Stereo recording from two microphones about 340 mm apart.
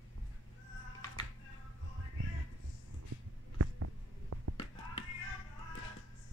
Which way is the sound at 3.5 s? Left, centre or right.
Right.